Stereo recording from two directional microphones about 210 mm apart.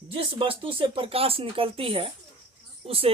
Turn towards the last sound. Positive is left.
turn(degrees=-25)  # may be behind; listen again after turning